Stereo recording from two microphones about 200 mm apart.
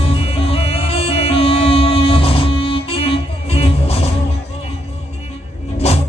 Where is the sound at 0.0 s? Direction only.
30° left (ahead or behind).